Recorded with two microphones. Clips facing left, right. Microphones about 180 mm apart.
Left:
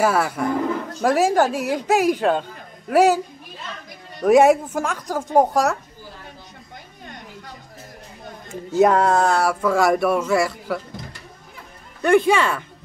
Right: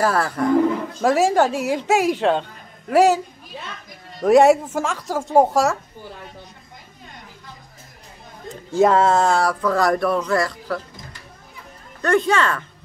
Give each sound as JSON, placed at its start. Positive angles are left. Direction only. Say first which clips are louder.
{"t": 0.0, "sound": "speech", "louder": "even", "side_deg": 5}
{"t": 4.2, "sound": "speech", "louder": "right 1 dB", "side_deg": 0}
{"t": 8.7, "sound": "speech", "louder": "even", "side_deg": 0}
{"t": 12.0, "sound": "speech", "louder": "left 2 dB", "side_deg": 10}